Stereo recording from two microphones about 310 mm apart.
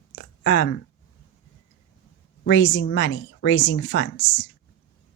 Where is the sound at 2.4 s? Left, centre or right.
Left.